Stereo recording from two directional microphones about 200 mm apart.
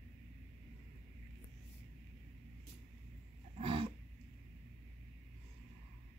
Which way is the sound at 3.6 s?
25° right (ahead or behind).